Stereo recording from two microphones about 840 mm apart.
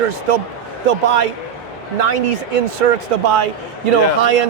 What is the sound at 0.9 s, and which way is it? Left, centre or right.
A man's voice, right.